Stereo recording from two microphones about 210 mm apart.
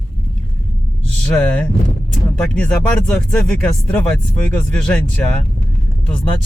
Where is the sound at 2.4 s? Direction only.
5° left (ahead or behind).